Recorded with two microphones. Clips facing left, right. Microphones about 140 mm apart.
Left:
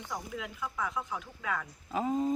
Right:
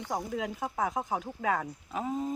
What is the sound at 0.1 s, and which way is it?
Speech, 40° right (ahead or behind).